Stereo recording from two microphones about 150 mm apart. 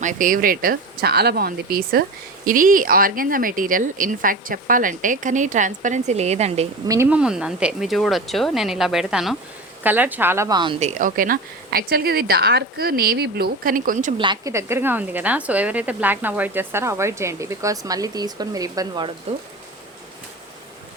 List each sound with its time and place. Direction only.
0.0 s speech: 60° right (ahead or behind); by 2.0 s 85° right
2.5 s speech: 65° right (ahead or behind); by 6.7 s 45° right (ahead or behind)
6.8 s speech: 25° right (ahead or behind)
7.1 s a woman's voice: 5° right (ahead or behind)
10.8 s speech: 50° right (ahead or behind)
14.2 s a woman's voice: 30° right (ahead or behind)
14.5 s a woman's voice: 15° right (ahead or behind)